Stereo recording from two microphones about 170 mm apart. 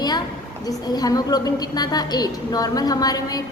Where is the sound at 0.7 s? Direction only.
20° left (ahead or behind).